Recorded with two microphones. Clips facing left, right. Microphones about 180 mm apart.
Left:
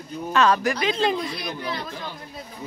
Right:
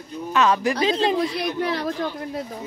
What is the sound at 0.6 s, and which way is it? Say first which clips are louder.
Speech: right 2 dB; 30° right (ahead or behind).